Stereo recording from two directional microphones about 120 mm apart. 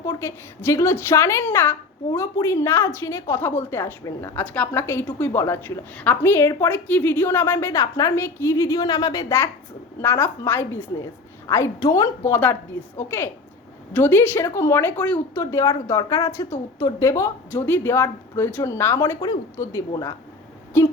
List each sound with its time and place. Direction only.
0.0 s a woman's voice: 25° left (ahead or behind)
10.0 s a woman's voice: 15° left (ahead or behind)
15.4 s a woman's voice: 25° left (ahead or behind)
20.7 s a woman's voice: 20° left (ahead or behind)